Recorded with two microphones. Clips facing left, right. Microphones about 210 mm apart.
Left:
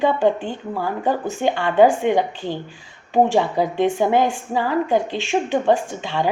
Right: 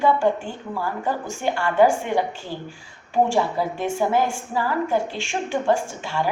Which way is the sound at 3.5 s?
20° left (ahead or behind).